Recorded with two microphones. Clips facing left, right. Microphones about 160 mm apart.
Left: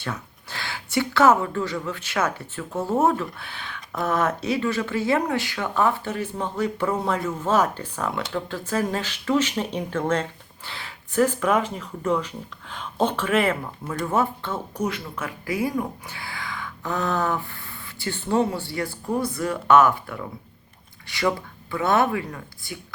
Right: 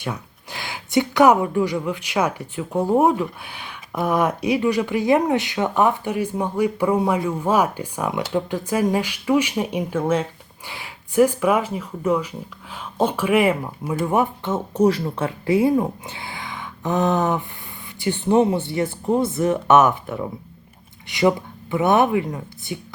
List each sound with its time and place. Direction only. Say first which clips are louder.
0.0 s speech: right 3 dB; 15° right (ahead or behind)